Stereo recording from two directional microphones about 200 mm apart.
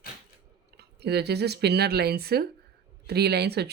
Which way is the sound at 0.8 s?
55° right (ahead or behind).